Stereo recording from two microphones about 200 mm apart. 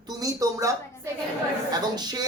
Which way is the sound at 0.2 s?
15° right (ahead or behind).